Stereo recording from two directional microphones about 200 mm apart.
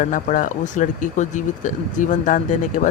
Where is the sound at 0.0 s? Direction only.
40° left (ahead or behind).